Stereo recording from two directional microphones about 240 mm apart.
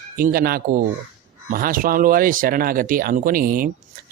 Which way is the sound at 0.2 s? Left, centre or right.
Right.